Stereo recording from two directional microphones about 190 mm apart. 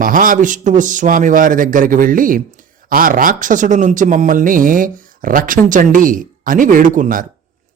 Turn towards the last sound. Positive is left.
turn(degrees=-45)  # may be behind; listen again after turning